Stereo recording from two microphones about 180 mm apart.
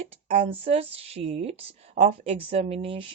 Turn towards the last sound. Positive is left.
turn(degrees=-30)  # may be behind; listen again after turning